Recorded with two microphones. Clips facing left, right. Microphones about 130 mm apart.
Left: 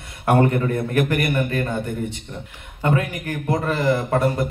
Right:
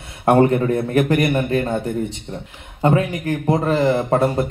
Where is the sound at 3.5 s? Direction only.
30° right (ahead or behind).